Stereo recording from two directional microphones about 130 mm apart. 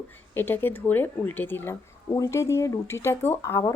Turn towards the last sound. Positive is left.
turn(degrees=25)  # may be behind; listen again after turning